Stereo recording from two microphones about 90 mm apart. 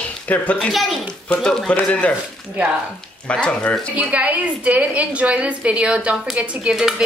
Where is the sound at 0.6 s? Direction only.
Centre (ahead or behind).